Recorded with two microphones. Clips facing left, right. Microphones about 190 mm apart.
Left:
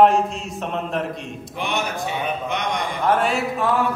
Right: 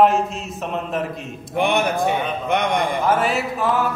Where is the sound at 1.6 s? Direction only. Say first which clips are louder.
Right 7 dB; 55° right (ahead or behind).